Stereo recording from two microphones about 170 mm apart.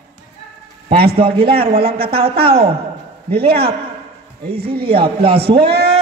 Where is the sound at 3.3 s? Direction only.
65° right (ahead or behind).